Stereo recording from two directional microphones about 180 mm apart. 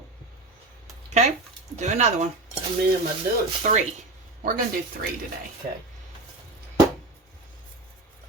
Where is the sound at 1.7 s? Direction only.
40° right (ahead or behind).